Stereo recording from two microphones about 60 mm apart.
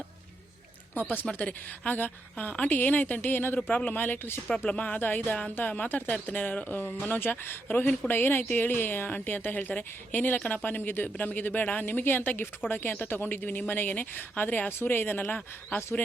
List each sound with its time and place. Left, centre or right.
1.1 s a woman's voice: left
4.4 s a woman's voice: centre
14.7 s speech: left